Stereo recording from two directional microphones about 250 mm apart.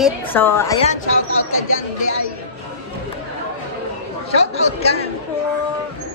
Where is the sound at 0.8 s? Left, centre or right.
Left.